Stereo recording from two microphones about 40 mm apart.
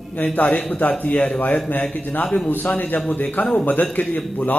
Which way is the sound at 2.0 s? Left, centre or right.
Left.